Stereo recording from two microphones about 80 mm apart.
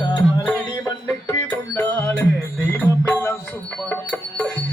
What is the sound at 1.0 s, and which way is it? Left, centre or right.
Music, left.